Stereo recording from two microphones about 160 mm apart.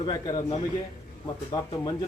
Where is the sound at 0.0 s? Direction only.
25° left (ahead or behind).